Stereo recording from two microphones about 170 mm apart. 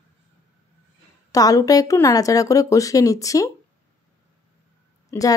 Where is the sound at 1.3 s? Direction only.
20° left (ahead or behind).